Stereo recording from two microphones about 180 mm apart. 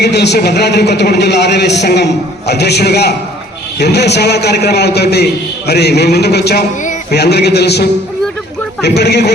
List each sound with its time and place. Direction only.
0.0 s a man's voice: 70° left (ahead or behind)